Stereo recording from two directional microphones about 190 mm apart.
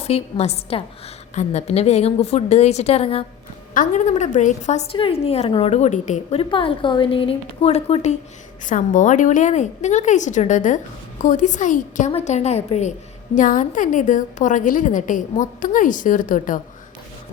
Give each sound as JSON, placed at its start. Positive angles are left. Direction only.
{"t": 0.0, "sound": "a woman's voice", "side_deg": 35}
{"t": 8.6, "sound": "a woman's voice", "side_deg": 40}